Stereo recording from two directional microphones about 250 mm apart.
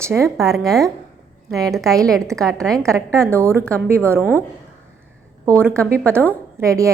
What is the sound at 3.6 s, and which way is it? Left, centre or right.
Speech, centre.